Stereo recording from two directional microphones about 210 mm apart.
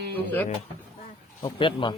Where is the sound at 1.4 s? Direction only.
25° left (ahead or behind).